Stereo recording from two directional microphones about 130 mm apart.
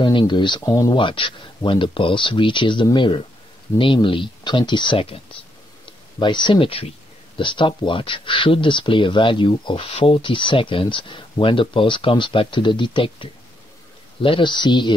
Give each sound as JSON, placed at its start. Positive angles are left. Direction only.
{"t": 0.0, "sound": "speech", "side_deg": 35}
{"t": 0.7, "sound": "speech", "side_deg": 25}
{"t": 0.9, "sound": "speech", "side_deg": 40}